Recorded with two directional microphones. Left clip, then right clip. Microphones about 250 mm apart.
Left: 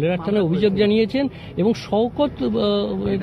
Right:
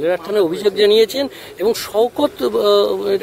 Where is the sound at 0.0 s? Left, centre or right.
Right.